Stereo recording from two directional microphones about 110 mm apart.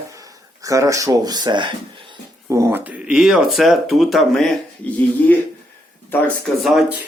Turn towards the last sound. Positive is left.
turn(degrees=0)  # may be behind; listen again after turning